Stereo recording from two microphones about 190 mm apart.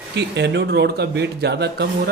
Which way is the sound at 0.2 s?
65° right (ahead or behind).